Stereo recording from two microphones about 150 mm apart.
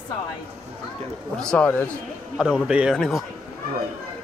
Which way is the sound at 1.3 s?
5° left (ahead or behind).